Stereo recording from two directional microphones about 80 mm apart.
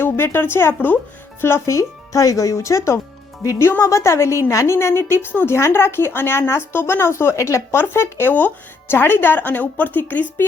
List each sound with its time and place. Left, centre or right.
0.0 s a woman's voice: left